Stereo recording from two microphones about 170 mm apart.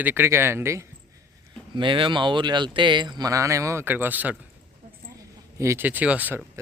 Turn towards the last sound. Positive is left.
turn(degrees=-10)  # may be behind; listen again after turning